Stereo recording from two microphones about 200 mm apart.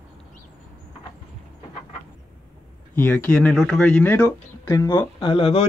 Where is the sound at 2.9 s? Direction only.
10° left (ahead or behind).